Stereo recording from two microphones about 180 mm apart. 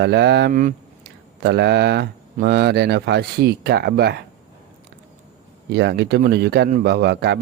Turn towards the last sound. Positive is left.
turn(degrees=-65)  # may be behind; listen again after turning